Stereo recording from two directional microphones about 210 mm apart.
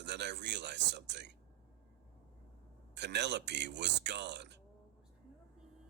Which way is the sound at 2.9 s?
55° right (ahead or behind).